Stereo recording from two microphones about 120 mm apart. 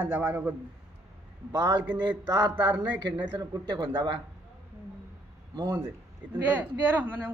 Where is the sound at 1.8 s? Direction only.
15° right (ahead or behind).